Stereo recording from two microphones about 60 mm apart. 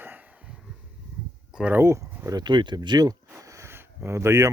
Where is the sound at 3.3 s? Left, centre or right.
Right.